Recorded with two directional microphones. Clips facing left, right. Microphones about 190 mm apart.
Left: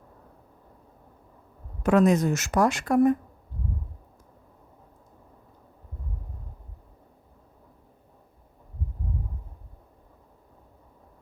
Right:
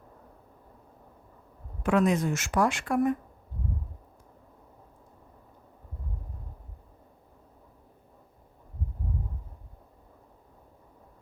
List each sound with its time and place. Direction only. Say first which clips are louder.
1.8 s a woman's voice: left 4 dB; 40° left (ahead or behind)